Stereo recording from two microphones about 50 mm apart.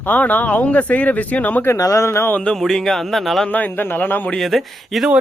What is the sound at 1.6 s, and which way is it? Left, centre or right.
Speech, left.